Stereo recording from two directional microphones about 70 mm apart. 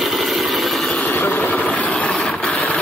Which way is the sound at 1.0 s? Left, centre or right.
Left.